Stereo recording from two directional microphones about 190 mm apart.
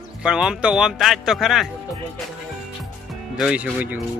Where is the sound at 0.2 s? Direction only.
5° right (ahead or behind).